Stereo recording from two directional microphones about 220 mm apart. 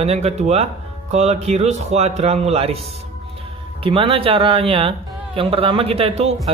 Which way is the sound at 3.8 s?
25° right (ahead or behind).